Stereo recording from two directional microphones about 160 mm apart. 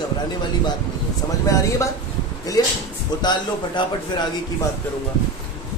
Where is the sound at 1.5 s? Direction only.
20° left (ahead or behind).